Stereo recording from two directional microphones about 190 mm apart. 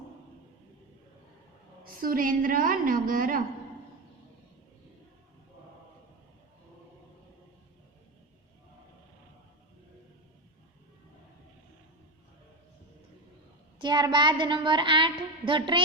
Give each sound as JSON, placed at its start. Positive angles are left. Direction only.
{"t": 1.8, "sound": "a woman's voice", "side_deg": -50}
{"t": 13.7, "sound": "a woman's voice", "side_deg": -25}